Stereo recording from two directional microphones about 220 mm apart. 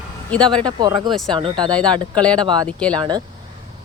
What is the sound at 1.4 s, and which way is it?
Speech, 20° right (ahead or behind).